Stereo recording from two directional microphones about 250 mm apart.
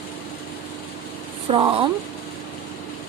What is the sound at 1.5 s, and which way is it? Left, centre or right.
Speech, right.